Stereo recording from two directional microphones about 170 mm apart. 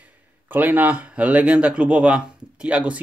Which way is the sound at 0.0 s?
10° right (ahead or behind).